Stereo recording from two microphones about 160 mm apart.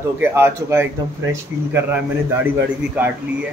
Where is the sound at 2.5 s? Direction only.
10° right (ahead or behind).